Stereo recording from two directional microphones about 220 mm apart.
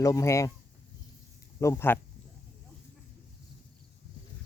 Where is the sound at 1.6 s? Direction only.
10° left (ahead or behind).